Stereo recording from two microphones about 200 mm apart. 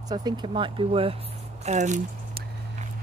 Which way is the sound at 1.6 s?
35° right (ahead or behind).